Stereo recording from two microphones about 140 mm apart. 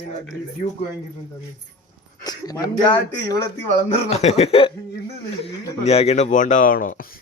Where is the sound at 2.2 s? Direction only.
30° left (ahead or behind).